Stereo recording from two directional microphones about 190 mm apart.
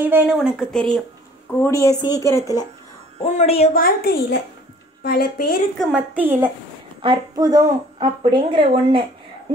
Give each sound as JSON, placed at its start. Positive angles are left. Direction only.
{"t": 0.0, "sound": "a woman's voice", "side_deg": -10}
{"t": 1.5, "sound": "speech", "side_deg": 15}
{"t": 3.2, "sound": "a woman's voice", "side_deg": 35}
{"t": 3.7, "sound": "a woman's voice", "side_deg": 50}
{"t": 5.8, "sound": "a woman's voice", "side_deg": 0}
{"t": 7.0, "sound": "a woman's voice", "side_deg": -25}